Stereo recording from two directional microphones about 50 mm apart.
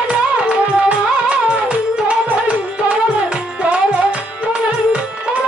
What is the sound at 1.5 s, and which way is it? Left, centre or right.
Music, right.